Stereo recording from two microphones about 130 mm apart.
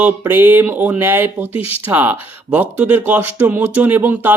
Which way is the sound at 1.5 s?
50° left (ahead or behind).